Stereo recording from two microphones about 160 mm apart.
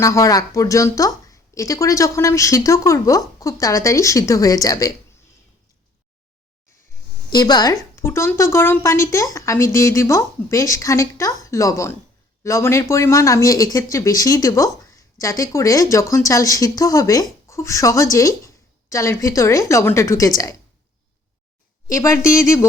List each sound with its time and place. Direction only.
0.0 s speech: 20° left (ahead or behind)
7.3 s speech: 25° left (ahead or behind)
21.9 s speech: 20° left (ahead or behind)